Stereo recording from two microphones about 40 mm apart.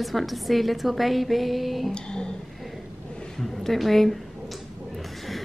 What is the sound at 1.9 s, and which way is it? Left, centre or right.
Speech, left.